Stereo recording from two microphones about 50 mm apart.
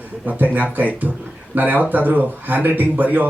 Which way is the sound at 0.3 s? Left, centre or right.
Right.